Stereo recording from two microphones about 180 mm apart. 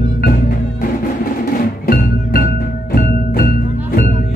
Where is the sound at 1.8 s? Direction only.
55° left (ahead or behind).